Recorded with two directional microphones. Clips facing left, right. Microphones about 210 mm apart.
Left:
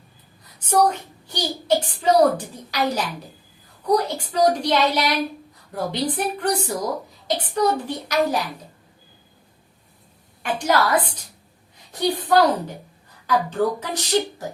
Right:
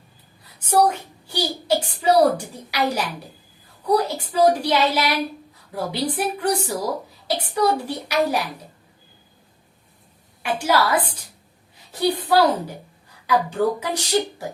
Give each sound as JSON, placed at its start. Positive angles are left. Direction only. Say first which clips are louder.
{"t": 0.7, "sound": "a child's voice", "louder": "right 1 dB", "side_deg": -10}
{"t": 10.4, "sound": "a child's voice", "louder": "even", "side_deg": -10}